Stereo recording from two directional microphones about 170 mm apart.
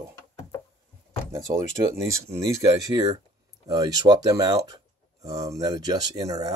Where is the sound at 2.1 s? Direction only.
20° right (ahead or behind).